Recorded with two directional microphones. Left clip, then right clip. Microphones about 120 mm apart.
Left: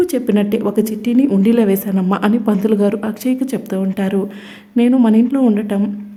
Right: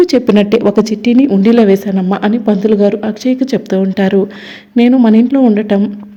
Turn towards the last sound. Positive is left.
turn(degrees=-25)  # may be behind; listen again after turning